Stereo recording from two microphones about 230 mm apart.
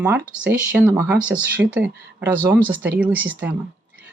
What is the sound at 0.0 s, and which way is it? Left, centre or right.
Speech, centre.